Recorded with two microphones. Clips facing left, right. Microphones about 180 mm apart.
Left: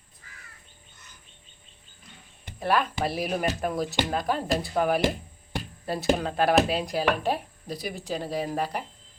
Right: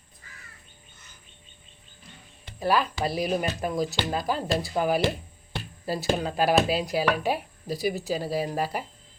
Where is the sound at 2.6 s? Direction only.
Centre (ahead or behind).